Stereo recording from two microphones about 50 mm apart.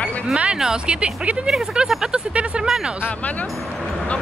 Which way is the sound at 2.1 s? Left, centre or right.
Right.